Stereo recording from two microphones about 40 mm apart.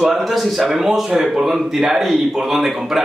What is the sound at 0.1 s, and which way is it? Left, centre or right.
A man's voice, centre.